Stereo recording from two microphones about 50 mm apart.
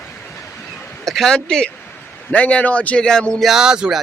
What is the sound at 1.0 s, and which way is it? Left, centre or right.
Speech, centre.